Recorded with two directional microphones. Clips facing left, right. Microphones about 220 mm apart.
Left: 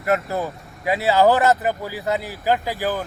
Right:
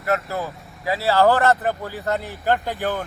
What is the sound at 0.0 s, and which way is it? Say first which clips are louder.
Speech: left 2 dB; 25° left (ahead or behind).